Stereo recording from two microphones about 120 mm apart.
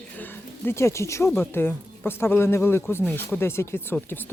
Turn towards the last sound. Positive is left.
turn(degrees=15)  # may be behind; listen again after turning